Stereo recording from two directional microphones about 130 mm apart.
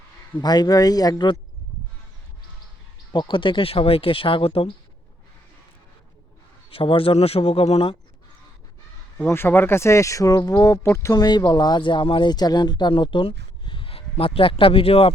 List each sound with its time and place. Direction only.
0.3 s speech: 30° left (ahead or behind)
3.1 s speech: 40° left (ahead or behind)
6.7 s speech: 45° left (ahead or behind)
9.1 s speech: 20° left (ahead or behind); by 15.1 s 45° left (ahead or behind)